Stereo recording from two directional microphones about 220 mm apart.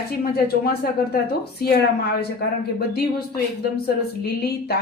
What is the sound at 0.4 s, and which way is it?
A woman's voice, 45° left (ahead or behind).